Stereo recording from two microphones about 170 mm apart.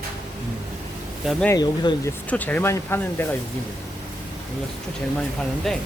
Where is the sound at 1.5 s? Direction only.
25° left (ahead or behind).